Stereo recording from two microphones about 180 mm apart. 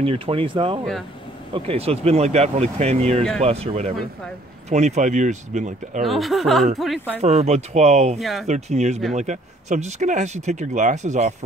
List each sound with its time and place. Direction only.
0.0 s speech: 30° right (ahead or behind)
6.0 s speech: centre (ahead or behind)
7.2 s speech: 35° right (ahead or behind)
8.2 s speech: centre (ahead or behind)
8.5 s speech: 40° right (ahead or behind)